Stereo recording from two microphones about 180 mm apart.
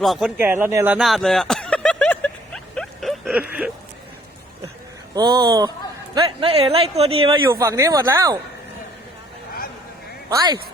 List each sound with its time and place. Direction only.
0.0 s speech: centre (ahead or behind)
0.3 s speech: 10° right (ahead or behind)
0.9 s a sound: centre (ahead or behind)
5.1 s speech: 20° right (ahead or behind)
6.4 s speech: 30° right (ahead or behind)
7.5 s speech: 15° right (ahead or behind)
10.2 s speech: 20° right (ahead or behind)